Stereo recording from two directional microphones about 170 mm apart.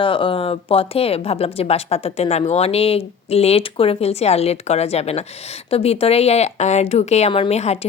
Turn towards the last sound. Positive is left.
turn(degrees=40)  # may be behind; listen again after turning